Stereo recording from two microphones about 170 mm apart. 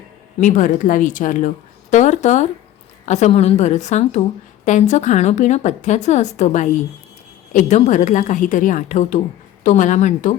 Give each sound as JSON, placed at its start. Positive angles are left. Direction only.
{"t": 0.3, "sound": "a woman's voice", "side_deg": 50}